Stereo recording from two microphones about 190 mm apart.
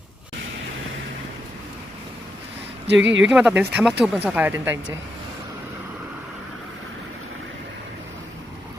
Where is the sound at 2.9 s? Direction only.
75° right (ahead or behind).